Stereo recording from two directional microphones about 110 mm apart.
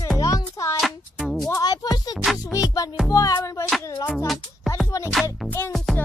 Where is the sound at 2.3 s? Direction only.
30° left (ahead or behind).